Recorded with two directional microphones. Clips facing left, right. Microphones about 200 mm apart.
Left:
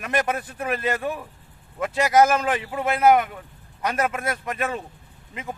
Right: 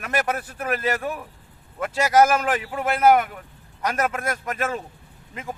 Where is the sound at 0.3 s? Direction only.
15° left (ahead or behind).